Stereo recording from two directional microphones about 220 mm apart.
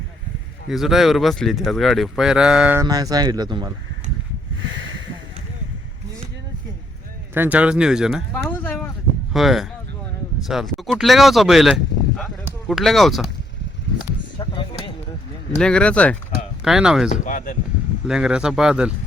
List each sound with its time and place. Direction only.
0.7 s speech: centre (ahead or behind)
2.8 s speech: 15° right (ahead or behind)
7.3 s speech: 10° right (ahead or behind)
8.4 s a sound: 10° left (ahead or behind)
9.3 s speech: centre (ahead or behind)
14.3 s a sound: 20° left (ahead or behind)
15.5 s speech: 5° left (ahead or behind)
17.1 s speech: 35° left (ahead or behind)
18.1 s speech: 5° right (ahead or behind)